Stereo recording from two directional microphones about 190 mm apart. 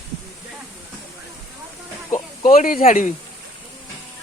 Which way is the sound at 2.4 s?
45° left (ahead or behind).